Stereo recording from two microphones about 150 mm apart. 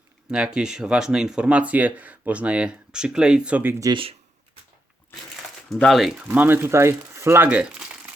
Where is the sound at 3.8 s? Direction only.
35° right (ahead or behind).